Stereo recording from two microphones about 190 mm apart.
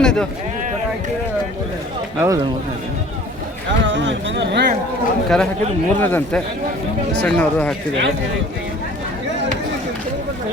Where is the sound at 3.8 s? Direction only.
75° right (ahead or behind).